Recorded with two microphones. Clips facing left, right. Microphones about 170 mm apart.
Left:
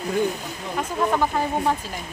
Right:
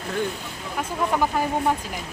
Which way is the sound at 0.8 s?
10° right (ahead or behind).